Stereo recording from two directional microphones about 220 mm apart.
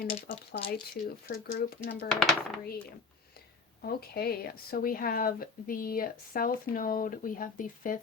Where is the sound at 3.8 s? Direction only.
45° left (ahead or behind).